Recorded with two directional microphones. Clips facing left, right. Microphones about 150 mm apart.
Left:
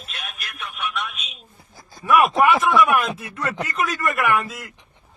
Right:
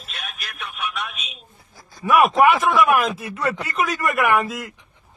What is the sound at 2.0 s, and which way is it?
A man's voice, centre (ahead or behind).